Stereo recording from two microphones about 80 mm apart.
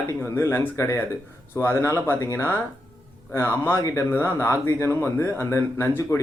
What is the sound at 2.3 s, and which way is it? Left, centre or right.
Speech, left.